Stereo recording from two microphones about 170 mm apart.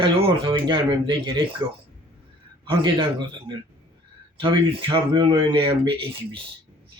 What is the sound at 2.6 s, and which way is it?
Speech, 25° right (ahead or behind).